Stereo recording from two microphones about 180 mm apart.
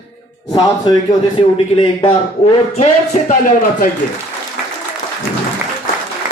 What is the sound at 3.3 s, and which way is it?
Speech, 50° left (ahead or behind).